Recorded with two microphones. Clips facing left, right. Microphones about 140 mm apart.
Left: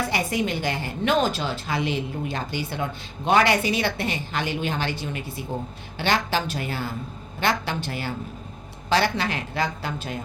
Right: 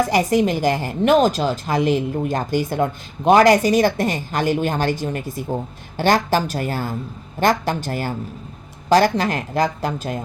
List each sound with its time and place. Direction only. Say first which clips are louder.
0.0 s a woman's voice: right 8 dB; 40° right (ahead or behind)